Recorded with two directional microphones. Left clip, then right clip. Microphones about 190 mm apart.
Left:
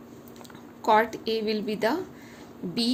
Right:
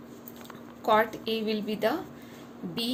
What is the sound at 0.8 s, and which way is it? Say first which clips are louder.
A woman's voice: left 2 dB; 40° left (ahead or behind).